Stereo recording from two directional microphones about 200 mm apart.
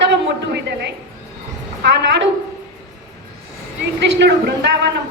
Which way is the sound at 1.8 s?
60° right (ahead or behind).